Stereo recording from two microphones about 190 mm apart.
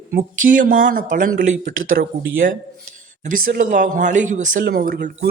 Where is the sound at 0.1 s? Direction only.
45° right (ahead or behind).